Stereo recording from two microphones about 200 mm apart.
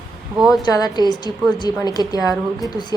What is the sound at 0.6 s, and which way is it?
A woman's voice, 20° left (ahead or behind).